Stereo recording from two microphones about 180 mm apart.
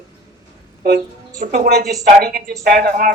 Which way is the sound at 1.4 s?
60° right (ahead or behind).